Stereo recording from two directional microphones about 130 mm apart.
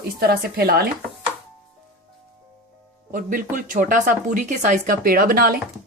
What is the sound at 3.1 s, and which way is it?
Speech, 90° right.